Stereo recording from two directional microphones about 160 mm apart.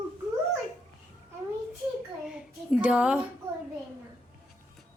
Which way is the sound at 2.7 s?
5° right (ahead or behind).